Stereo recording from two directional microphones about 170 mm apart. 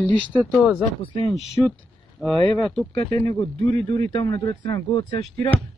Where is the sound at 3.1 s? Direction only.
20° left (ahead or behind).